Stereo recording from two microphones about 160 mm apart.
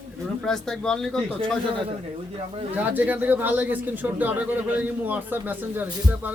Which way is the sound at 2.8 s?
10° right (ahead or behind).